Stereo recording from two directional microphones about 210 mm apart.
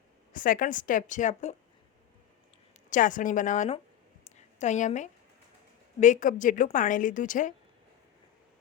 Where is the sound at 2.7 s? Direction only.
40° left (ahead or behind).